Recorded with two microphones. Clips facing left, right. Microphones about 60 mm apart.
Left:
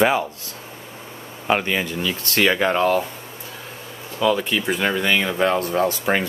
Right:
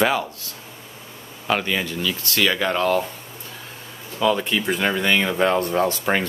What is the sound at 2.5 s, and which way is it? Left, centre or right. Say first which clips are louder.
Speech: left 2 dB; centre.